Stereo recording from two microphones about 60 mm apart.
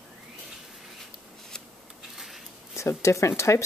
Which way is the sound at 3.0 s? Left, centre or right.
Left.